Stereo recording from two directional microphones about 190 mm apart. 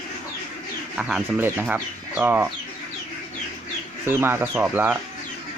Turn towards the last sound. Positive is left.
turn(degrees=-10)  # may be behind; listen again after turning